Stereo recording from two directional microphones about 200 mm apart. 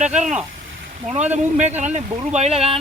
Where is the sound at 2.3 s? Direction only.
30° right (ahead or behind).